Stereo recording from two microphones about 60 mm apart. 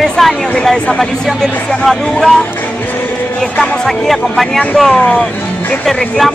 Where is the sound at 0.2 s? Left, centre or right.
Centre.